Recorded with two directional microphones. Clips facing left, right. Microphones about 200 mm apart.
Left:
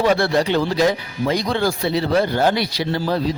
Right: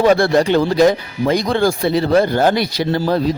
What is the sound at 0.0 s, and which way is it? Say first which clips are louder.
Speech: right 4 dB; 45° right (ahead or behind).